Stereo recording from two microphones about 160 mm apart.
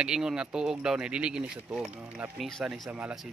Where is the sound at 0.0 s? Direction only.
5° right (ahead or behind).